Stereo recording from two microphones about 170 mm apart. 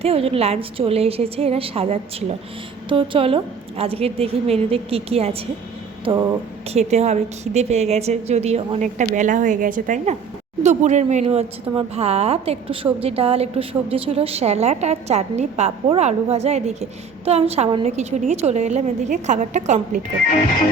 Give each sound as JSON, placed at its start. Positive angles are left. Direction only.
{"t": 0.0, "sound": "a woman's voice", "side_deg": -35}
{"t": 6.7, "sound": "a woman's voice", "side_deg": -40}